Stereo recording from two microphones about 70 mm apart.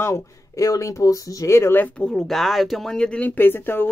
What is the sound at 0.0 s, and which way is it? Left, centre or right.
Speech, left.